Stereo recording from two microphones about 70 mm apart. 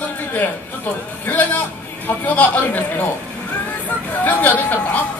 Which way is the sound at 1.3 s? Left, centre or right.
Left.